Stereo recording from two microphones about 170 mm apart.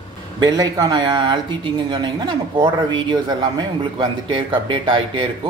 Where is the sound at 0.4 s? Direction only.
20° right (ahead or behind).